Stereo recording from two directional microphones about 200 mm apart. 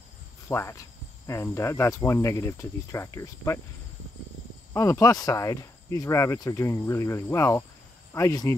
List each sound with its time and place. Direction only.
0.5 s speech: 15° left (ahead or behind)
4.7 s speech: 15° left (ahead or behind)